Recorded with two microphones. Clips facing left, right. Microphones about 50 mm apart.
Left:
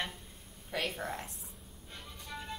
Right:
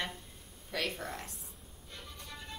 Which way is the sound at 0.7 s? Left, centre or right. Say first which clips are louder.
Left 1 dB; centre.